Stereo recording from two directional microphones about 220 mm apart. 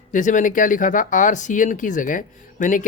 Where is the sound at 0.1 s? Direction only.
35° left (ahead or behind).